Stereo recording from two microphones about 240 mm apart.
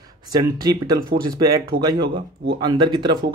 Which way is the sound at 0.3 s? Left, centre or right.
Centre.